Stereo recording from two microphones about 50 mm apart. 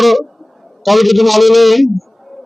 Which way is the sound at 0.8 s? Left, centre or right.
Centre.